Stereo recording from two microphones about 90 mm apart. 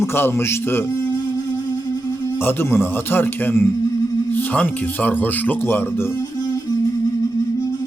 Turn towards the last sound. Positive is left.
turn(degrees=25)  # may be behind; listen again after turning